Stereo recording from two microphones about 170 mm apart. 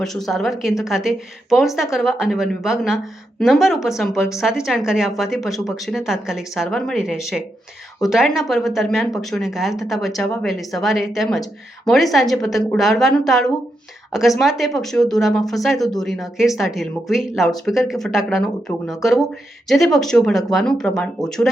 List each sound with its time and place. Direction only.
0.0 s speech: centre (ahead or behind)
19.6 s speech: centre (ahead or behind)